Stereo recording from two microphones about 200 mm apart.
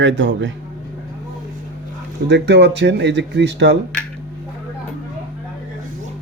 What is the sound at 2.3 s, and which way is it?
Speech, 60° right (ahead or behind).